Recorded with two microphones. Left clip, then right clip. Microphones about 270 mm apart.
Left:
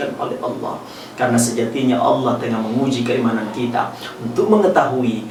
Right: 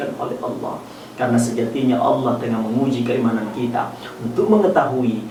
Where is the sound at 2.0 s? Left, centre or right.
Right.